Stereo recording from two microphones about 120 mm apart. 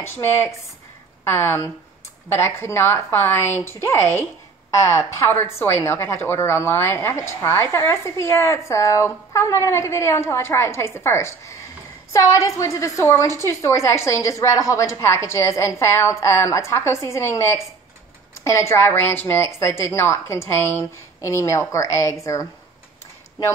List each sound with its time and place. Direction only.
0.0 s a woman's voice: 20° left (ahead or behind)